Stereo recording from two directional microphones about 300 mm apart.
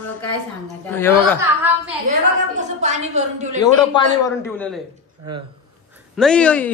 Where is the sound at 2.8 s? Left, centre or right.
Right.